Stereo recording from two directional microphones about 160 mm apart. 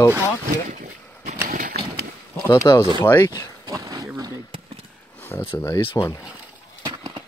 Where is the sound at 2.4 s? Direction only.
20° left (ahead or behind).